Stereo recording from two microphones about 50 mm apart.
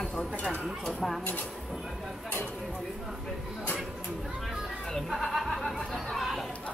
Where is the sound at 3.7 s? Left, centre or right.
Centre.